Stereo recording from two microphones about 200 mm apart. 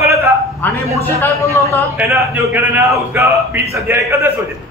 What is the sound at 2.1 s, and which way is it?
A man's voice, 10° right (ahead or behind).